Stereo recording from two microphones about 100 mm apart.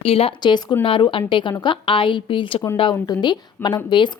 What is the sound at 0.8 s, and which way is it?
A woman's voice, 60° left (ahead or behind).